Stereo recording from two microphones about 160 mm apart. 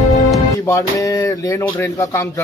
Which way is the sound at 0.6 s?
20° left (ahead or behind).